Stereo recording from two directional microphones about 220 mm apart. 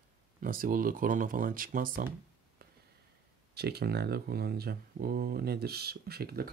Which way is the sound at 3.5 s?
45° right (ahead or behind).